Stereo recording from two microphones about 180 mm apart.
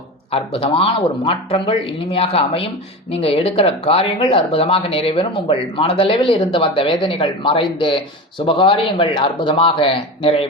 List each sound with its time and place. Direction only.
0.3 s speech: 30° left (ahead or behind)